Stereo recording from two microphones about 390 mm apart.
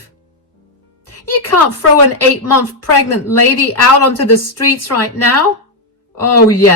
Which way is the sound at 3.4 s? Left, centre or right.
Left.